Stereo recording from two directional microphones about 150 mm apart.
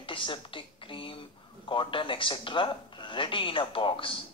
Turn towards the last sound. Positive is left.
turn(degrees=35)  # may be behind; listen again after turning